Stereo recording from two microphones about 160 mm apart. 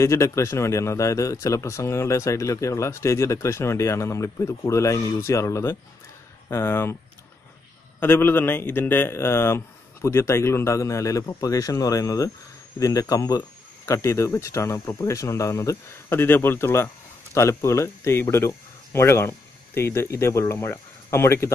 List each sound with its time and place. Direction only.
0.0 s speech: 20° left (ahead or behind)
8.0 s speech: 15° left (ahead or behind)